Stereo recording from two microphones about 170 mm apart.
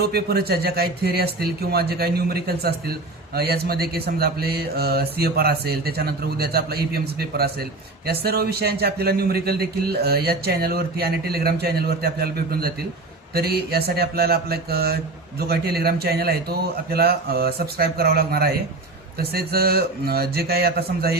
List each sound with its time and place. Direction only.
0.0 s speech: 65° right (ahead or behind)